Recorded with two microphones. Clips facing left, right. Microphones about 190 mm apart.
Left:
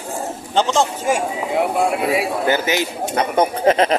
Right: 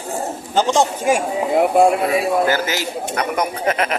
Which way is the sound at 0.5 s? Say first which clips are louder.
Right 1 dB; 15° right (ahead or behind).